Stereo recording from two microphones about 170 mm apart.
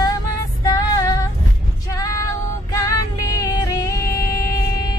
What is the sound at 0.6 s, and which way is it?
Female singing, 20° left (ahead or behind).